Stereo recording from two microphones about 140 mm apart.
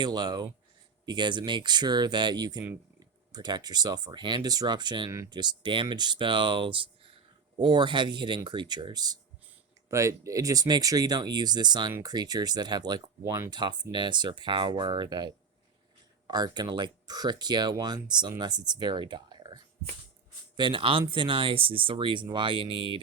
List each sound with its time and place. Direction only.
0.0 s speech: 30° right (ahead or behind)
13.6 s speech: 30° right (ahead or behind)
20.6 s speech: 35° right (ahead or behind)